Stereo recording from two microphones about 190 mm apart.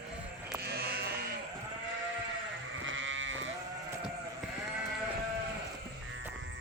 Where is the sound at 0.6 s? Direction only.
55° right (ahead or behind).